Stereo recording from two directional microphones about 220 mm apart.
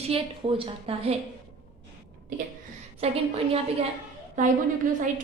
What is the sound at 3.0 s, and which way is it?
Speech, 30° right (ahead or behind).